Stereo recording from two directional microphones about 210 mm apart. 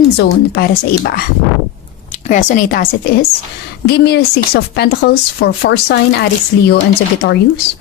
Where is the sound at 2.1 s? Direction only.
35° left (ahead or behind); by 6.2 s 50° left (ahead or behind).